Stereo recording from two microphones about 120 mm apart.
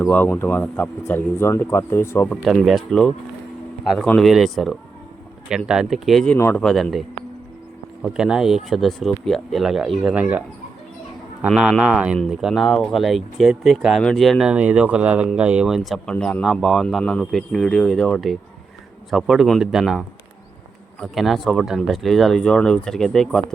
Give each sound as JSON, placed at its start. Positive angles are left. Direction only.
{"t": 0.0, "sound": "speech", "side_deg": 15}
{"t": 2.3, "sound": "speech", "side_deg": 0}
{"t": 6.3, "sound": "speech", "side_deg": 15}
{"t": 6.6, "sound": "speech", "side_deg": 5}
{"t": 8.1, "sound": "speech", "side_deg": -5}
{"t": 10.0, "sound": "speech", "side_deg": -10}
{"t": 11.4, "sound": "speech", "side_deg": 0}
{"t": 16.1, "sound": "speech", "side_deg": 10}
{"t": 16.4, "sound": "speech", "side_deg": 0}